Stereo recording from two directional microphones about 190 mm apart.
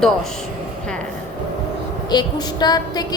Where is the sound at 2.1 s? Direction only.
20° left (ahead or behind).